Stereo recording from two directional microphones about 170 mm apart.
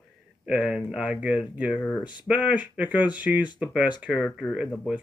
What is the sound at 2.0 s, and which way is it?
Speech, 25° left (ahead or behind).